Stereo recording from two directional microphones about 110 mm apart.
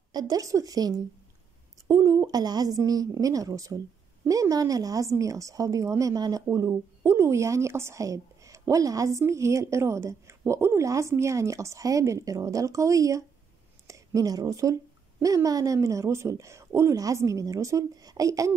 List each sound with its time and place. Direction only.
0.1 s a woman's voice: 35° right (ahead or behind)